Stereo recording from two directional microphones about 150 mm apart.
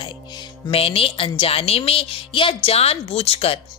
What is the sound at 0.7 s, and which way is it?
Music, 40° left (ahead or behind).